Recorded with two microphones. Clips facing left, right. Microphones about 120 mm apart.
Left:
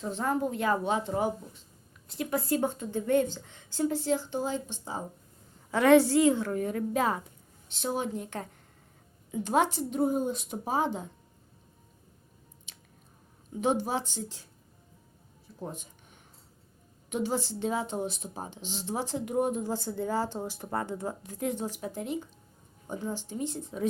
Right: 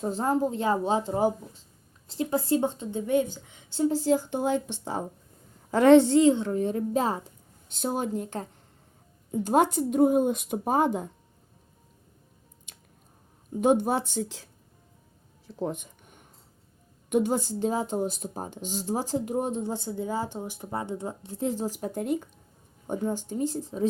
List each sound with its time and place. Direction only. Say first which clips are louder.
0.0 s a woman's voice: right 4 dB; 35° right (ahead or behind); by 3.9 s 20° right (ahead or behind)
3.9 s a woman's voice: right 4 dB; 40° right (ahead or behind); by 5.0 s 65° right (ahead or behind)
5.7 s a woman's voice: right 4 dB; 30° right (ahead or behind)
7.7 s speech: right 3 dB; 45° right (ahead or behind)
12.7 s squish: right 2 dB; 50° right (ahead or behind)
13.6 s a woman's voice: right 5 dB; 50° right (ahead or behind); by 14.4 s 75° right (ahead or behind)
15.6 s a sound: right 8 dB; 60° right (ahead or behind)
17.1 s speech: right 6 dB; 50° right (ahead or behind); by 23.9 s 35° right (ahead or behind)